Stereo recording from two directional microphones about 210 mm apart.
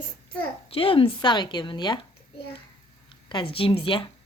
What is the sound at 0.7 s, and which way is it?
A woman's voice, 25° left (ahead or behind).